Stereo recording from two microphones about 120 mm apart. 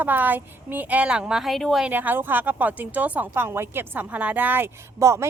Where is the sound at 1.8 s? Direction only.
15° right (ahead or behind).